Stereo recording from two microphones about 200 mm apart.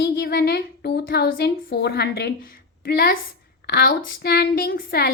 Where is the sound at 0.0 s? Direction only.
50° left (ahead or behind).